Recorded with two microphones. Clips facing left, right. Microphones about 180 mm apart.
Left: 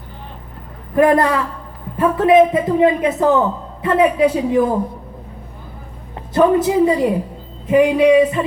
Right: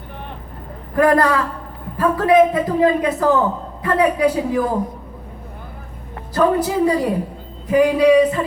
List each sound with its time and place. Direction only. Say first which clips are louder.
0.9 s speech: left 2 dB; 20° left (ahead or behind)
6.3 s speech: left 3 dB; 20° left (ahead or behind)